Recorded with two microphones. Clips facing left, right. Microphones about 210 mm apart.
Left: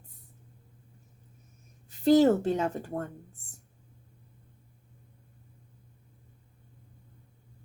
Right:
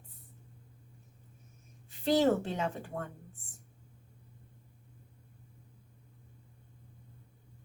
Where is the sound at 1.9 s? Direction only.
40° left (ahead or behind).